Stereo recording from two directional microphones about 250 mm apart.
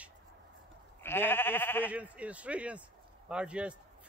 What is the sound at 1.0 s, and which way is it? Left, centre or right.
Speech, centre.